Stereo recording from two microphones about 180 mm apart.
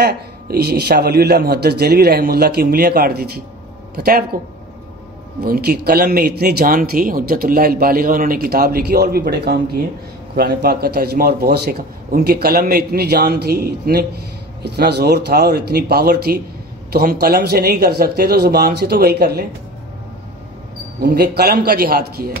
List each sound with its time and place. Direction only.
0.0 s speech: 60° right (ahead or behind)
5.4 s speech: 60° right (ahead or behind)
21.0 s speech: 60° right (ahead or behind)